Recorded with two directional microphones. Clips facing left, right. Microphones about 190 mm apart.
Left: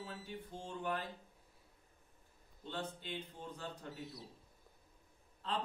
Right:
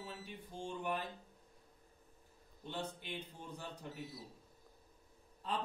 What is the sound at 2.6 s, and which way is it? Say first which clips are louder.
Speech: even; 15° right (ahead or behind).